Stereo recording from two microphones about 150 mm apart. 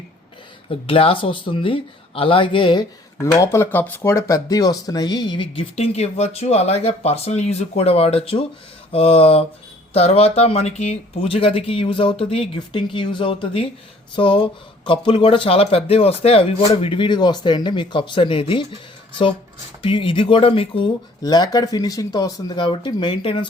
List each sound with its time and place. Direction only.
0.7 s speech: 40° left (ahead or behind)
3.3 s speech: 20° left (ahead or behind); by 18.8 s 35° left (ahead or behind)
19.8 s speech: 35° left (ahead or behind)
21.2 s speech: 25° left (ahead or behind)